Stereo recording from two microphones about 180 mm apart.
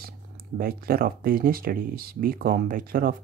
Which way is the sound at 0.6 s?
55° right (ahead or behind).